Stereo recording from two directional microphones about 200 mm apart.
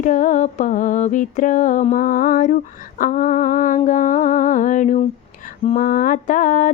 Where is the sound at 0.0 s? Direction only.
40° left (ahead or behind).